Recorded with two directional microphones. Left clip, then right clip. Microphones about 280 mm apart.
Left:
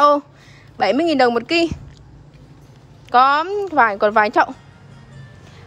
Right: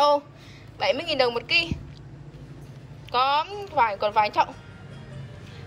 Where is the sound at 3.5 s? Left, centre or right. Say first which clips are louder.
Left 8 dB; left.